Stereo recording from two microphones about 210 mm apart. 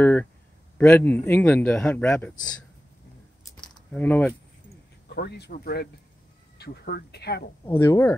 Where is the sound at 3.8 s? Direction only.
5° left (ahead or behind).